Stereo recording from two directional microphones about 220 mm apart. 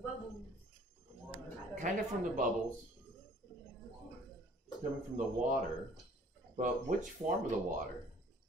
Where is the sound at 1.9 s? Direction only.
35° right (ahead or behind).